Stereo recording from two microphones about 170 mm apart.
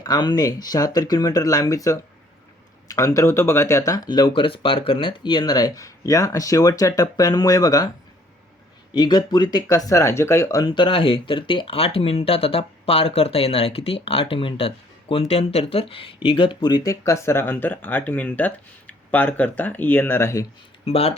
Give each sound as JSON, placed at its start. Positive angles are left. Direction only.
{"t": 0.0, "sound": "speech", "side_deg": 25}
{"t": 8.9, "sound": "speech", "side_deg": 25}
{"t": 10.7, "sound": "speech", "side_deg": 30}
{"t": 20.8, "sound": "speech", "side_deg": 35}